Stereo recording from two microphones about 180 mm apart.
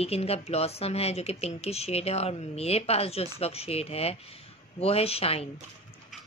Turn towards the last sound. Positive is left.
turn(degrees=35)  # may be behind; listen again after turning